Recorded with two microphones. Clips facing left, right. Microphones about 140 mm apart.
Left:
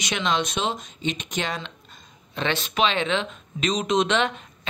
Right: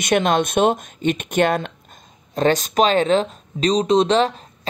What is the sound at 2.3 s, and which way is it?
Speech, 40° right (ahead or behind).